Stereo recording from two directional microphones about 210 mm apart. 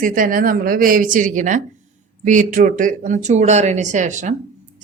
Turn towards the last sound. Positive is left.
turn(degrees=-35)  # may be behind; listen again after turning